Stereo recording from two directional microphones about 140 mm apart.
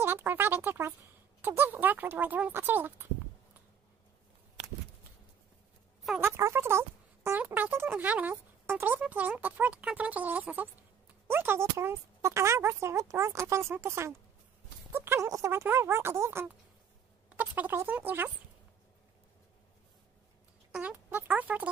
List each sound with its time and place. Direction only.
0.0 s speech: 15° right (ahead or behind)
6.2 s speech: 20° right (ahead or behind)
20.7 s speech: 10° right (ahead or behind)